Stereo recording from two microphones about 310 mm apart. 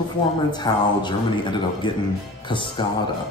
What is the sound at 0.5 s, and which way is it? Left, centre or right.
Speech, centre.